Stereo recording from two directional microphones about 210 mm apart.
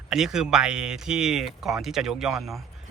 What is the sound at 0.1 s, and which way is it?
Speech, centre (ahead or behind).